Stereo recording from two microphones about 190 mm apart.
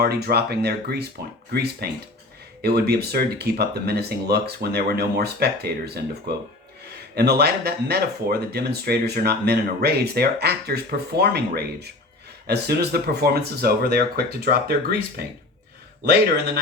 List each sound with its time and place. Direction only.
0.0 s speech: 55° right (ahead or behind)